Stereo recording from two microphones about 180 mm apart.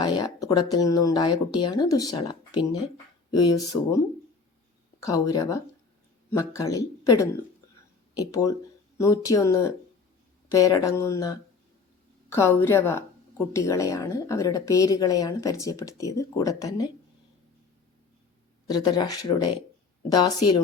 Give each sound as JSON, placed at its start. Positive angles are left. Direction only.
{"t": 0.0, "sound": "speech", "side_deg": 25}
{"t": 5.0, "sound": "a woman's voice", "side_deg": 20}
{"t": 18.7, "sound": "speech", "side_deg": 20}